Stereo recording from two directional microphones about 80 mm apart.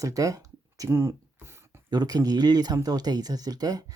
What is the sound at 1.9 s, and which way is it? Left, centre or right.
Speech, right.